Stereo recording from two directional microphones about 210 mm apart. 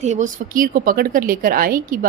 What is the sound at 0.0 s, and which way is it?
Speech, 35° right (ahead or behind).